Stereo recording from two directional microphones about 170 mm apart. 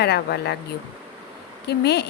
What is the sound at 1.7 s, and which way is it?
Speech, 75° left (ahead or behind).